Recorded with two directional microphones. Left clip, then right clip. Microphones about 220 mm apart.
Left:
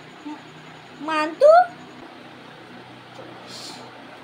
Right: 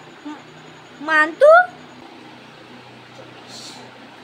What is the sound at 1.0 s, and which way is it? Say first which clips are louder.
Speech: right 4 dB; 25° right (ahead or behind).